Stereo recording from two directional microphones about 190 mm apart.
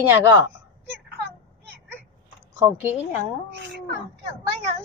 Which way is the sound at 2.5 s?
15° right (ahead or behind).